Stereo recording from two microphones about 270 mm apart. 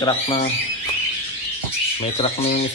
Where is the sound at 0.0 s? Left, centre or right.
Centre.